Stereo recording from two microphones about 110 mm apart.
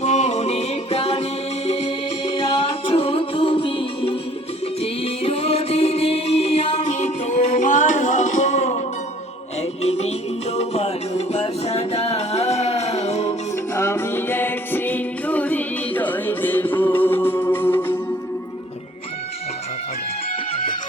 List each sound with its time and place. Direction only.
0.0 s music: 90° left; by 1.9 s 70° left (ahead or behind)
2.9 s music: 60° left (ahead or behind); by 8.8 s 90° left
9.6 s music: 75° left (ahead or behind)
13.7 s music: 25° left (ahead or behind)